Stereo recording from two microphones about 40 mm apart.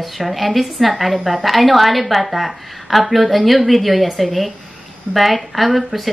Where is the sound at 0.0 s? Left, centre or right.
Centre.